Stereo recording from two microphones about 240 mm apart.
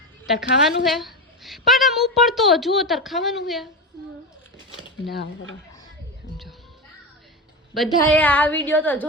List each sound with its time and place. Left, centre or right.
0.6 s a woman's voice: centre
5.1 s speech: left
7.9 s speech: centre